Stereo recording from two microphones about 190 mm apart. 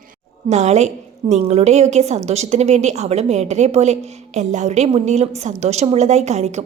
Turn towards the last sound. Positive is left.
turn(degrees=-35)  # may be behind; listen again after turning